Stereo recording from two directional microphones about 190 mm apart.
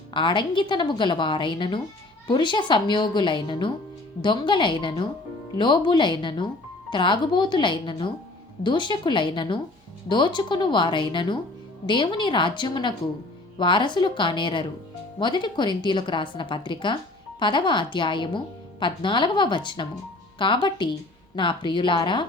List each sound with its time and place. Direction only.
0.1 s a woman's voice: 25° left (ahead or behind)